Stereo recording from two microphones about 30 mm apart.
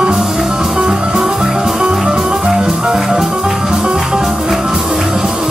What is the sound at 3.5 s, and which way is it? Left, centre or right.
Music, right.